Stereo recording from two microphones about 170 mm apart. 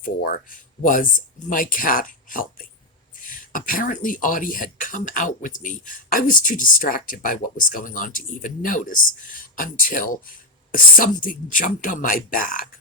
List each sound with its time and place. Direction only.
0.0 s speech: 55° left (ahead or behind)